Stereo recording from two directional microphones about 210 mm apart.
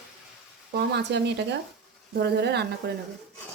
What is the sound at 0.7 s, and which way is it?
Speech, 55° right (ahead or behind).